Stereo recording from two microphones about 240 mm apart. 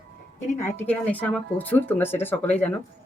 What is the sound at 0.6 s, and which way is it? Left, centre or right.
Speech, centre.